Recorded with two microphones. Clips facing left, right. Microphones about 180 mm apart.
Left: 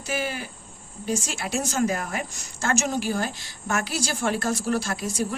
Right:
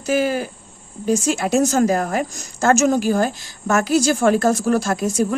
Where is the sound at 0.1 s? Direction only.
45° right (ahead or behind).